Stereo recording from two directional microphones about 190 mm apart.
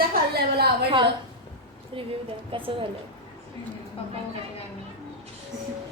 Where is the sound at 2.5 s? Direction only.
30° right (ahead or behind).